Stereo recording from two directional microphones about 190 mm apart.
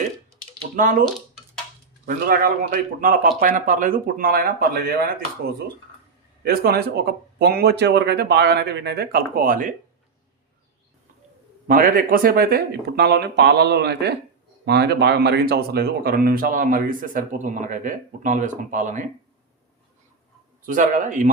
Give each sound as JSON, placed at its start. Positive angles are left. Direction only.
{"t": 2.0, "sound": "speech", "side_deg": -50}
{"t": 6.4, "sound": "speech", "side_deg": -50}
{"t": 11.7, "sound": "speech", "side_deg": -45}
{"t": 20.7, "sound": "speech", "side_deg": -45}